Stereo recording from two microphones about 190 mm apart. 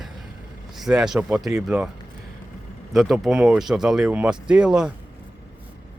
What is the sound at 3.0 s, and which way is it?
Speech, centre (ahead or behind).